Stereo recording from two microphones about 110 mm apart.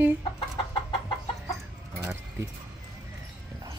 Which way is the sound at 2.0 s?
20° right (ahead or behind).